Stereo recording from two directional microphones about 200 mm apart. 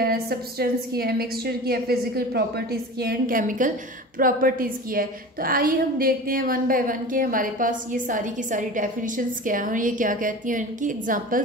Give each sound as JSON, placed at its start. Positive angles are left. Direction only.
{"t": 0.0, "sound": "a woman's voice", "side_deg": -50}